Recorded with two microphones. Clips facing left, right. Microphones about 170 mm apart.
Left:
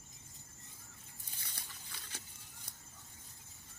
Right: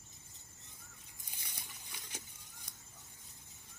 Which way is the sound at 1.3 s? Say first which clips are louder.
Right 1 dB; 15° right (ahead or behind).